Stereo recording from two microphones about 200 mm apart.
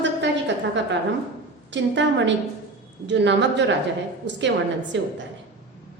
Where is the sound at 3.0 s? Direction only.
60° right (ahead or behind).